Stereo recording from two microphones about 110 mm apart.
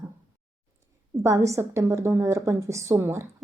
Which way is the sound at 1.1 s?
25° right (ahead or behind).